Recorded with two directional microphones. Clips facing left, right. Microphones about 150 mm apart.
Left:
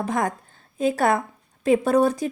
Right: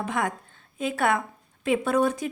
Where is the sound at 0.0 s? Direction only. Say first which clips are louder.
Left 3 dB; 40° left (ahead or behind).